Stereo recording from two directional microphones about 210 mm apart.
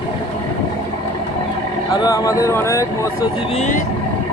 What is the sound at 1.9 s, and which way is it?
Speech, 15° left (ahead or behind).